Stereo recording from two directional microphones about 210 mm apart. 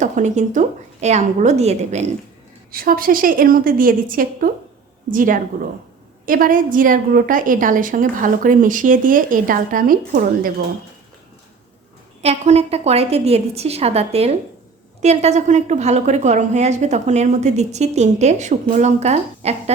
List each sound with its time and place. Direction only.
0.0 s a woman's voice: 35° right (ahead or behind)
2.7 s a woman's voice: 45° right (ahead or behind)
12.2 s a woman's voice: 30° right (ahead or behind)